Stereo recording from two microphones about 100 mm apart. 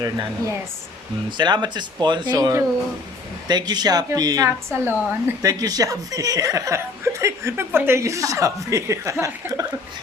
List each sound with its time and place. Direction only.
1.4 s speech: 50° right (ahead or behind)
4.4 s a woman's voice: 25° right (ahead or behind)
5.4 s speech: 40° right (ahead or behind)